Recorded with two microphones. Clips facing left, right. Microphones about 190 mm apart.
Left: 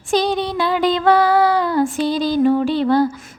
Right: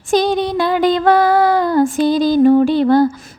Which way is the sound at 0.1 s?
45° right (ahead or behind).